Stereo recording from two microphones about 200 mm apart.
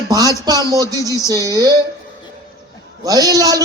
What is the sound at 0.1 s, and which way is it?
Speech, 20° right (ahead or behind).